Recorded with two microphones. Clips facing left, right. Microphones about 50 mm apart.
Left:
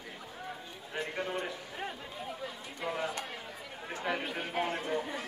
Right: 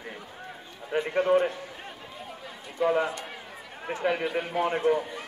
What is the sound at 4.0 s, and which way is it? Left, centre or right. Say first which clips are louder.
A man's voice: right 7 dB; right.